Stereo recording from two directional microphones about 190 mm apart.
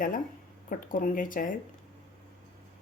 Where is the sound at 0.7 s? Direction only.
45° left (ahead or behind).